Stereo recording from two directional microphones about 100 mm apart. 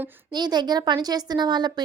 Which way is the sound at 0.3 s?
45° right (ahead or behind).